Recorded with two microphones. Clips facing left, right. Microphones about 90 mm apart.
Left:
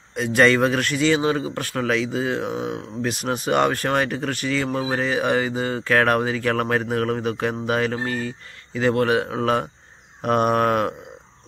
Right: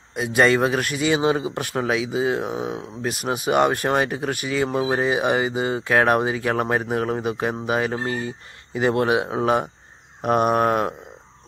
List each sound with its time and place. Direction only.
0.1 s speech: 10° right (ahead or behind)